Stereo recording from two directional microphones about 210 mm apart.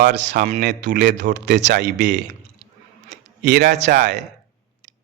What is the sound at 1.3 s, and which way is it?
Speech, 55° right (ahead or behind).